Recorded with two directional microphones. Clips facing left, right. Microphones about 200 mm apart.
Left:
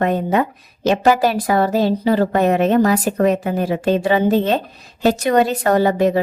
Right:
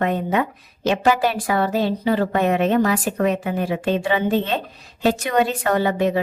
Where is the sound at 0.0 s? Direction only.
40° left (ahead or behind).